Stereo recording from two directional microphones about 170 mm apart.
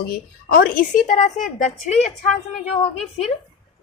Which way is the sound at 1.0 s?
45° left (ahead or behind).